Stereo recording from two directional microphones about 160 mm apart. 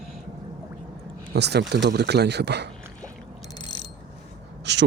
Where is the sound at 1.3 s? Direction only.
90° right.